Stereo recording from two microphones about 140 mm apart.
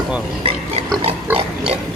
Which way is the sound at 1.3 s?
15° right (ahead or behind).